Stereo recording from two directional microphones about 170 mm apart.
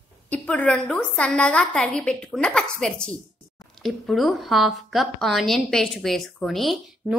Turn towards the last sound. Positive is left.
turn(degrees=0)  # may be behind; listen again after turning